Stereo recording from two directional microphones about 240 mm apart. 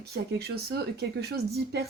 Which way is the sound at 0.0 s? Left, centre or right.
Right.